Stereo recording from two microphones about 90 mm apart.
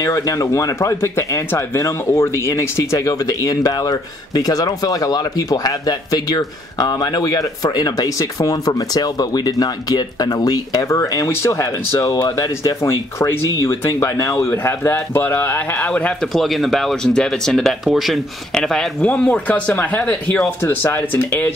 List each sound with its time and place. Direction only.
0.0 s speech: 40° left (ahead or behind); by 16.3 s 10° left (ahead or behind)
16.3 s speech: centre (ahead or behind); by 21.5 s 20° left (ahead or behind)